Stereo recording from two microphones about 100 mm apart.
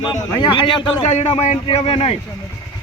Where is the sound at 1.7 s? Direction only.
70° left (ahead or behind).